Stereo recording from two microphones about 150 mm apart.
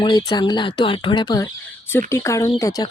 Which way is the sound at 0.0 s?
30° left (ahead or behind).